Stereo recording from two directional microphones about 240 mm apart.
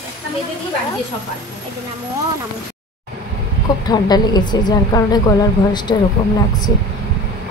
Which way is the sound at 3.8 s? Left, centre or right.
Centre.